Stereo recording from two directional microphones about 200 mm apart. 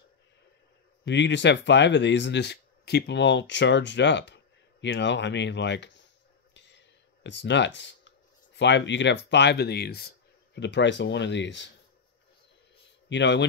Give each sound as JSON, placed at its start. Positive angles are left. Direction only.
{"t": 1.0, "sound": "speech", "side_deg": 60}
{"t": 6.5, "sound": "a sound", "side_deg": 60}
{"t": 7.2, "sound": "speech", "side_deg": 60}
{"t": 13.1, "sound": "speech", "side_deg": 60}